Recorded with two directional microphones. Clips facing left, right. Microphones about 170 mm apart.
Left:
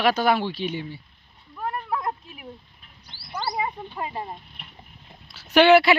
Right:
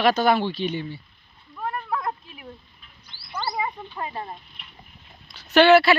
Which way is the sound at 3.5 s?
15° left (ahead or behind).